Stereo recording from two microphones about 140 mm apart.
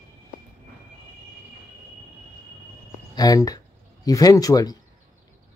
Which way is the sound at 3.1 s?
25° left (ahead or behind).